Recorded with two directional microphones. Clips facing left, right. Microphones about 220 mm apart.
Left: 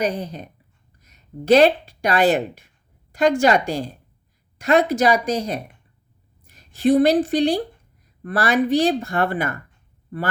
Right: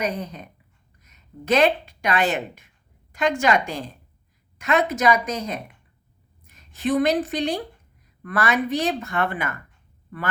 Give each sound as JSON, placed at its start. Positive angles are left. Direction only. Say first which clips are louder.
{"t": 0.0, "sound": "a woman's voice", "louder": "left 4 dB", "side_deg": 35}